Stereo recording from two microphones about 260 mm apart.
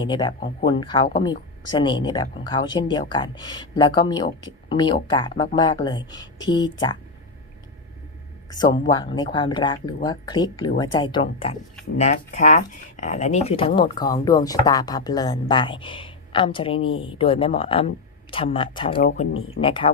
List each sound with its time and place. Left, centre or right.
0.0 s speech: centre
8.9 s speech: centre
19.3 s speech: left
19.8 s speech: left